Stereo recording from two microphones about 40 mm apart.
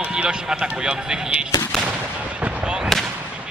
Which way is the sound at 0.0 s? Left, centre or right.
Right.